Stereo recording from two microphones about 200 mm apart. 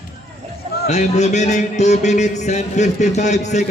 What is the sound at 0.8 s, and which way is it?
Speech, 35° left (ahead or behind).